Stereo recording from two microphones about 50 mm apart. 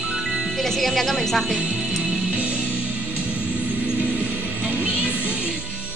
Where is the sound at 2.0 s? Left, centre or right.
Right.